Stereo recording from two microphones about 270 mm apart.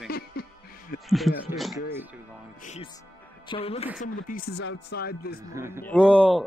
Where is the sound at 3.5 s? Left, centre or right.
Left.